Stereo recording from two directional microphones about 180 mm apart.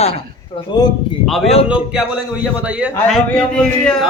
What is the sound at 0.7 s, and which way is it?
Speech, 20° left (ahead or behind).